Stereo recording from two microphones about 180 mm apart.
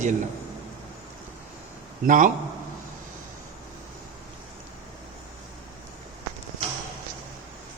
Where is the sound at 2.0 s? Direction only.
45° right (ahead or behind).